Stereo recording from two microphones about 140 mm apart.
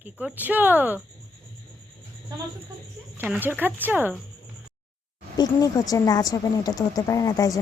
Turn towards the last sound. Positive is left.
turn(degrees=25)  # may be behind; listen again after turning